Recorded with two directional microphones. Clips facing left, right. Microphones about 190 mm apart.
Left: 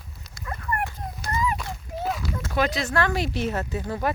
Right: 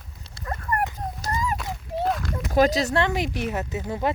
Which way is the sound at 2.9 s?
20° right (ahead or behind).